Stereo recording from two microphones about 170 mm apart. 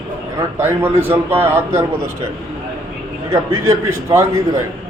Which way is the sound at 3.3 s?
15° right (ahead or behind).